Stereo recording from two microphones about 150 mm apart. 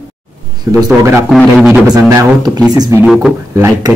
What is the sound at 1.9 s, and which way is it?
Speech, 25° right (ahead or behind).